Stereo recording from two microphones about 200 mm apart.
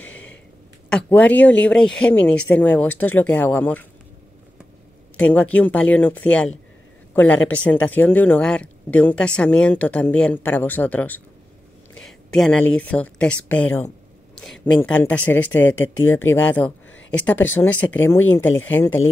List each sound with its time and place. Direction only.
0.0 s a sound: 5° left (ahead or behind)
0.8 s speech: 5° left (ahead or behind)
5.1 s speech: 10° left (ahead or behind)
15.7 s speech: 80° left
16.3 s speech: 10° left (ahead or behind)